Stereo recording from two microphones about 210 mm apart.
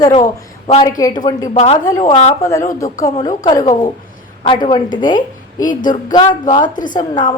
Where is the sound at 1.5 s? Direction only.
30° left (ahead or behind).